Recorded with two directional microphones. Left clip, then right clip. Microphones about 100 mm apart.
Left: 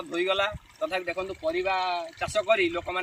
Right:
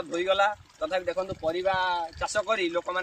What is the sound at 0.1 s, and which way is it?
Speech, 40° right (ahead or behind).